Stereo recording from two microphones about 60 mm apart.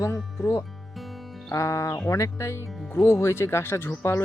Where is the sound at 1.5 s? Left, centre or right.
Left.